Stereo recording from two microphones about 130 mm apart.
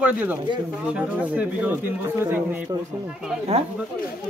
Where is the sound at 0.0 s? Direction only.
15° right (ahead or behind).